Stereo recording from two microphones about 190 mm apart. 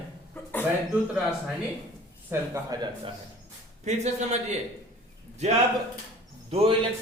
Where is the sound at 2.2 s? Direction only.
15° right (ahead or behind).